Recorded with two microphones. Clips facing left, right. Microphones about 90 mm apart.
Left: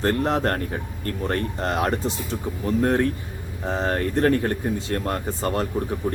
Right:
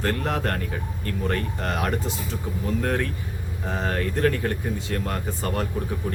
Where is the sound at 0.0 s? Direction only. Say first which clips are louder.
Left 4 dB; 30° left (ahead or behind).